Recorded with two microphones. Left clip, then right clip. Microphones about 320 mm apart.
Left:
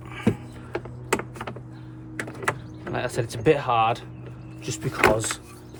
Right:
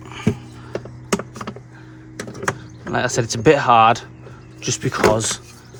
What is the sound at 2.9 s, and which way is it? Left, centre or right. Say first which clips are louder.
Speech: right 8 dB; centre.